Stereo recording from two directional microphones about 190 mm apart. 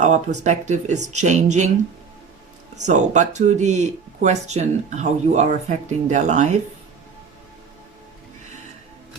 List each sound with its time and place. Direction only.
0.4 s speech: 40° right (ahead or behind)
2.8 s speech: 40° right (ahead or behind)